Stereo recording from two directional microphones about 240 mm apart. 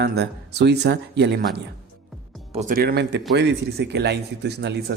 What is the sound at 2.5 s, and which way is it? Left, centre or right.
Speech, right.